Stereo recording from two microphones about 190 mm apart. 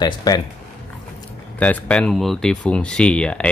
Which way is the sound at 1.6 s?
5° left (ahead or behind).